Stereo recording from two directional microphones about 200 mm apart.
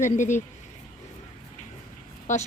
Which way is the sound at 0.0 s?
35° left (ahead or behind).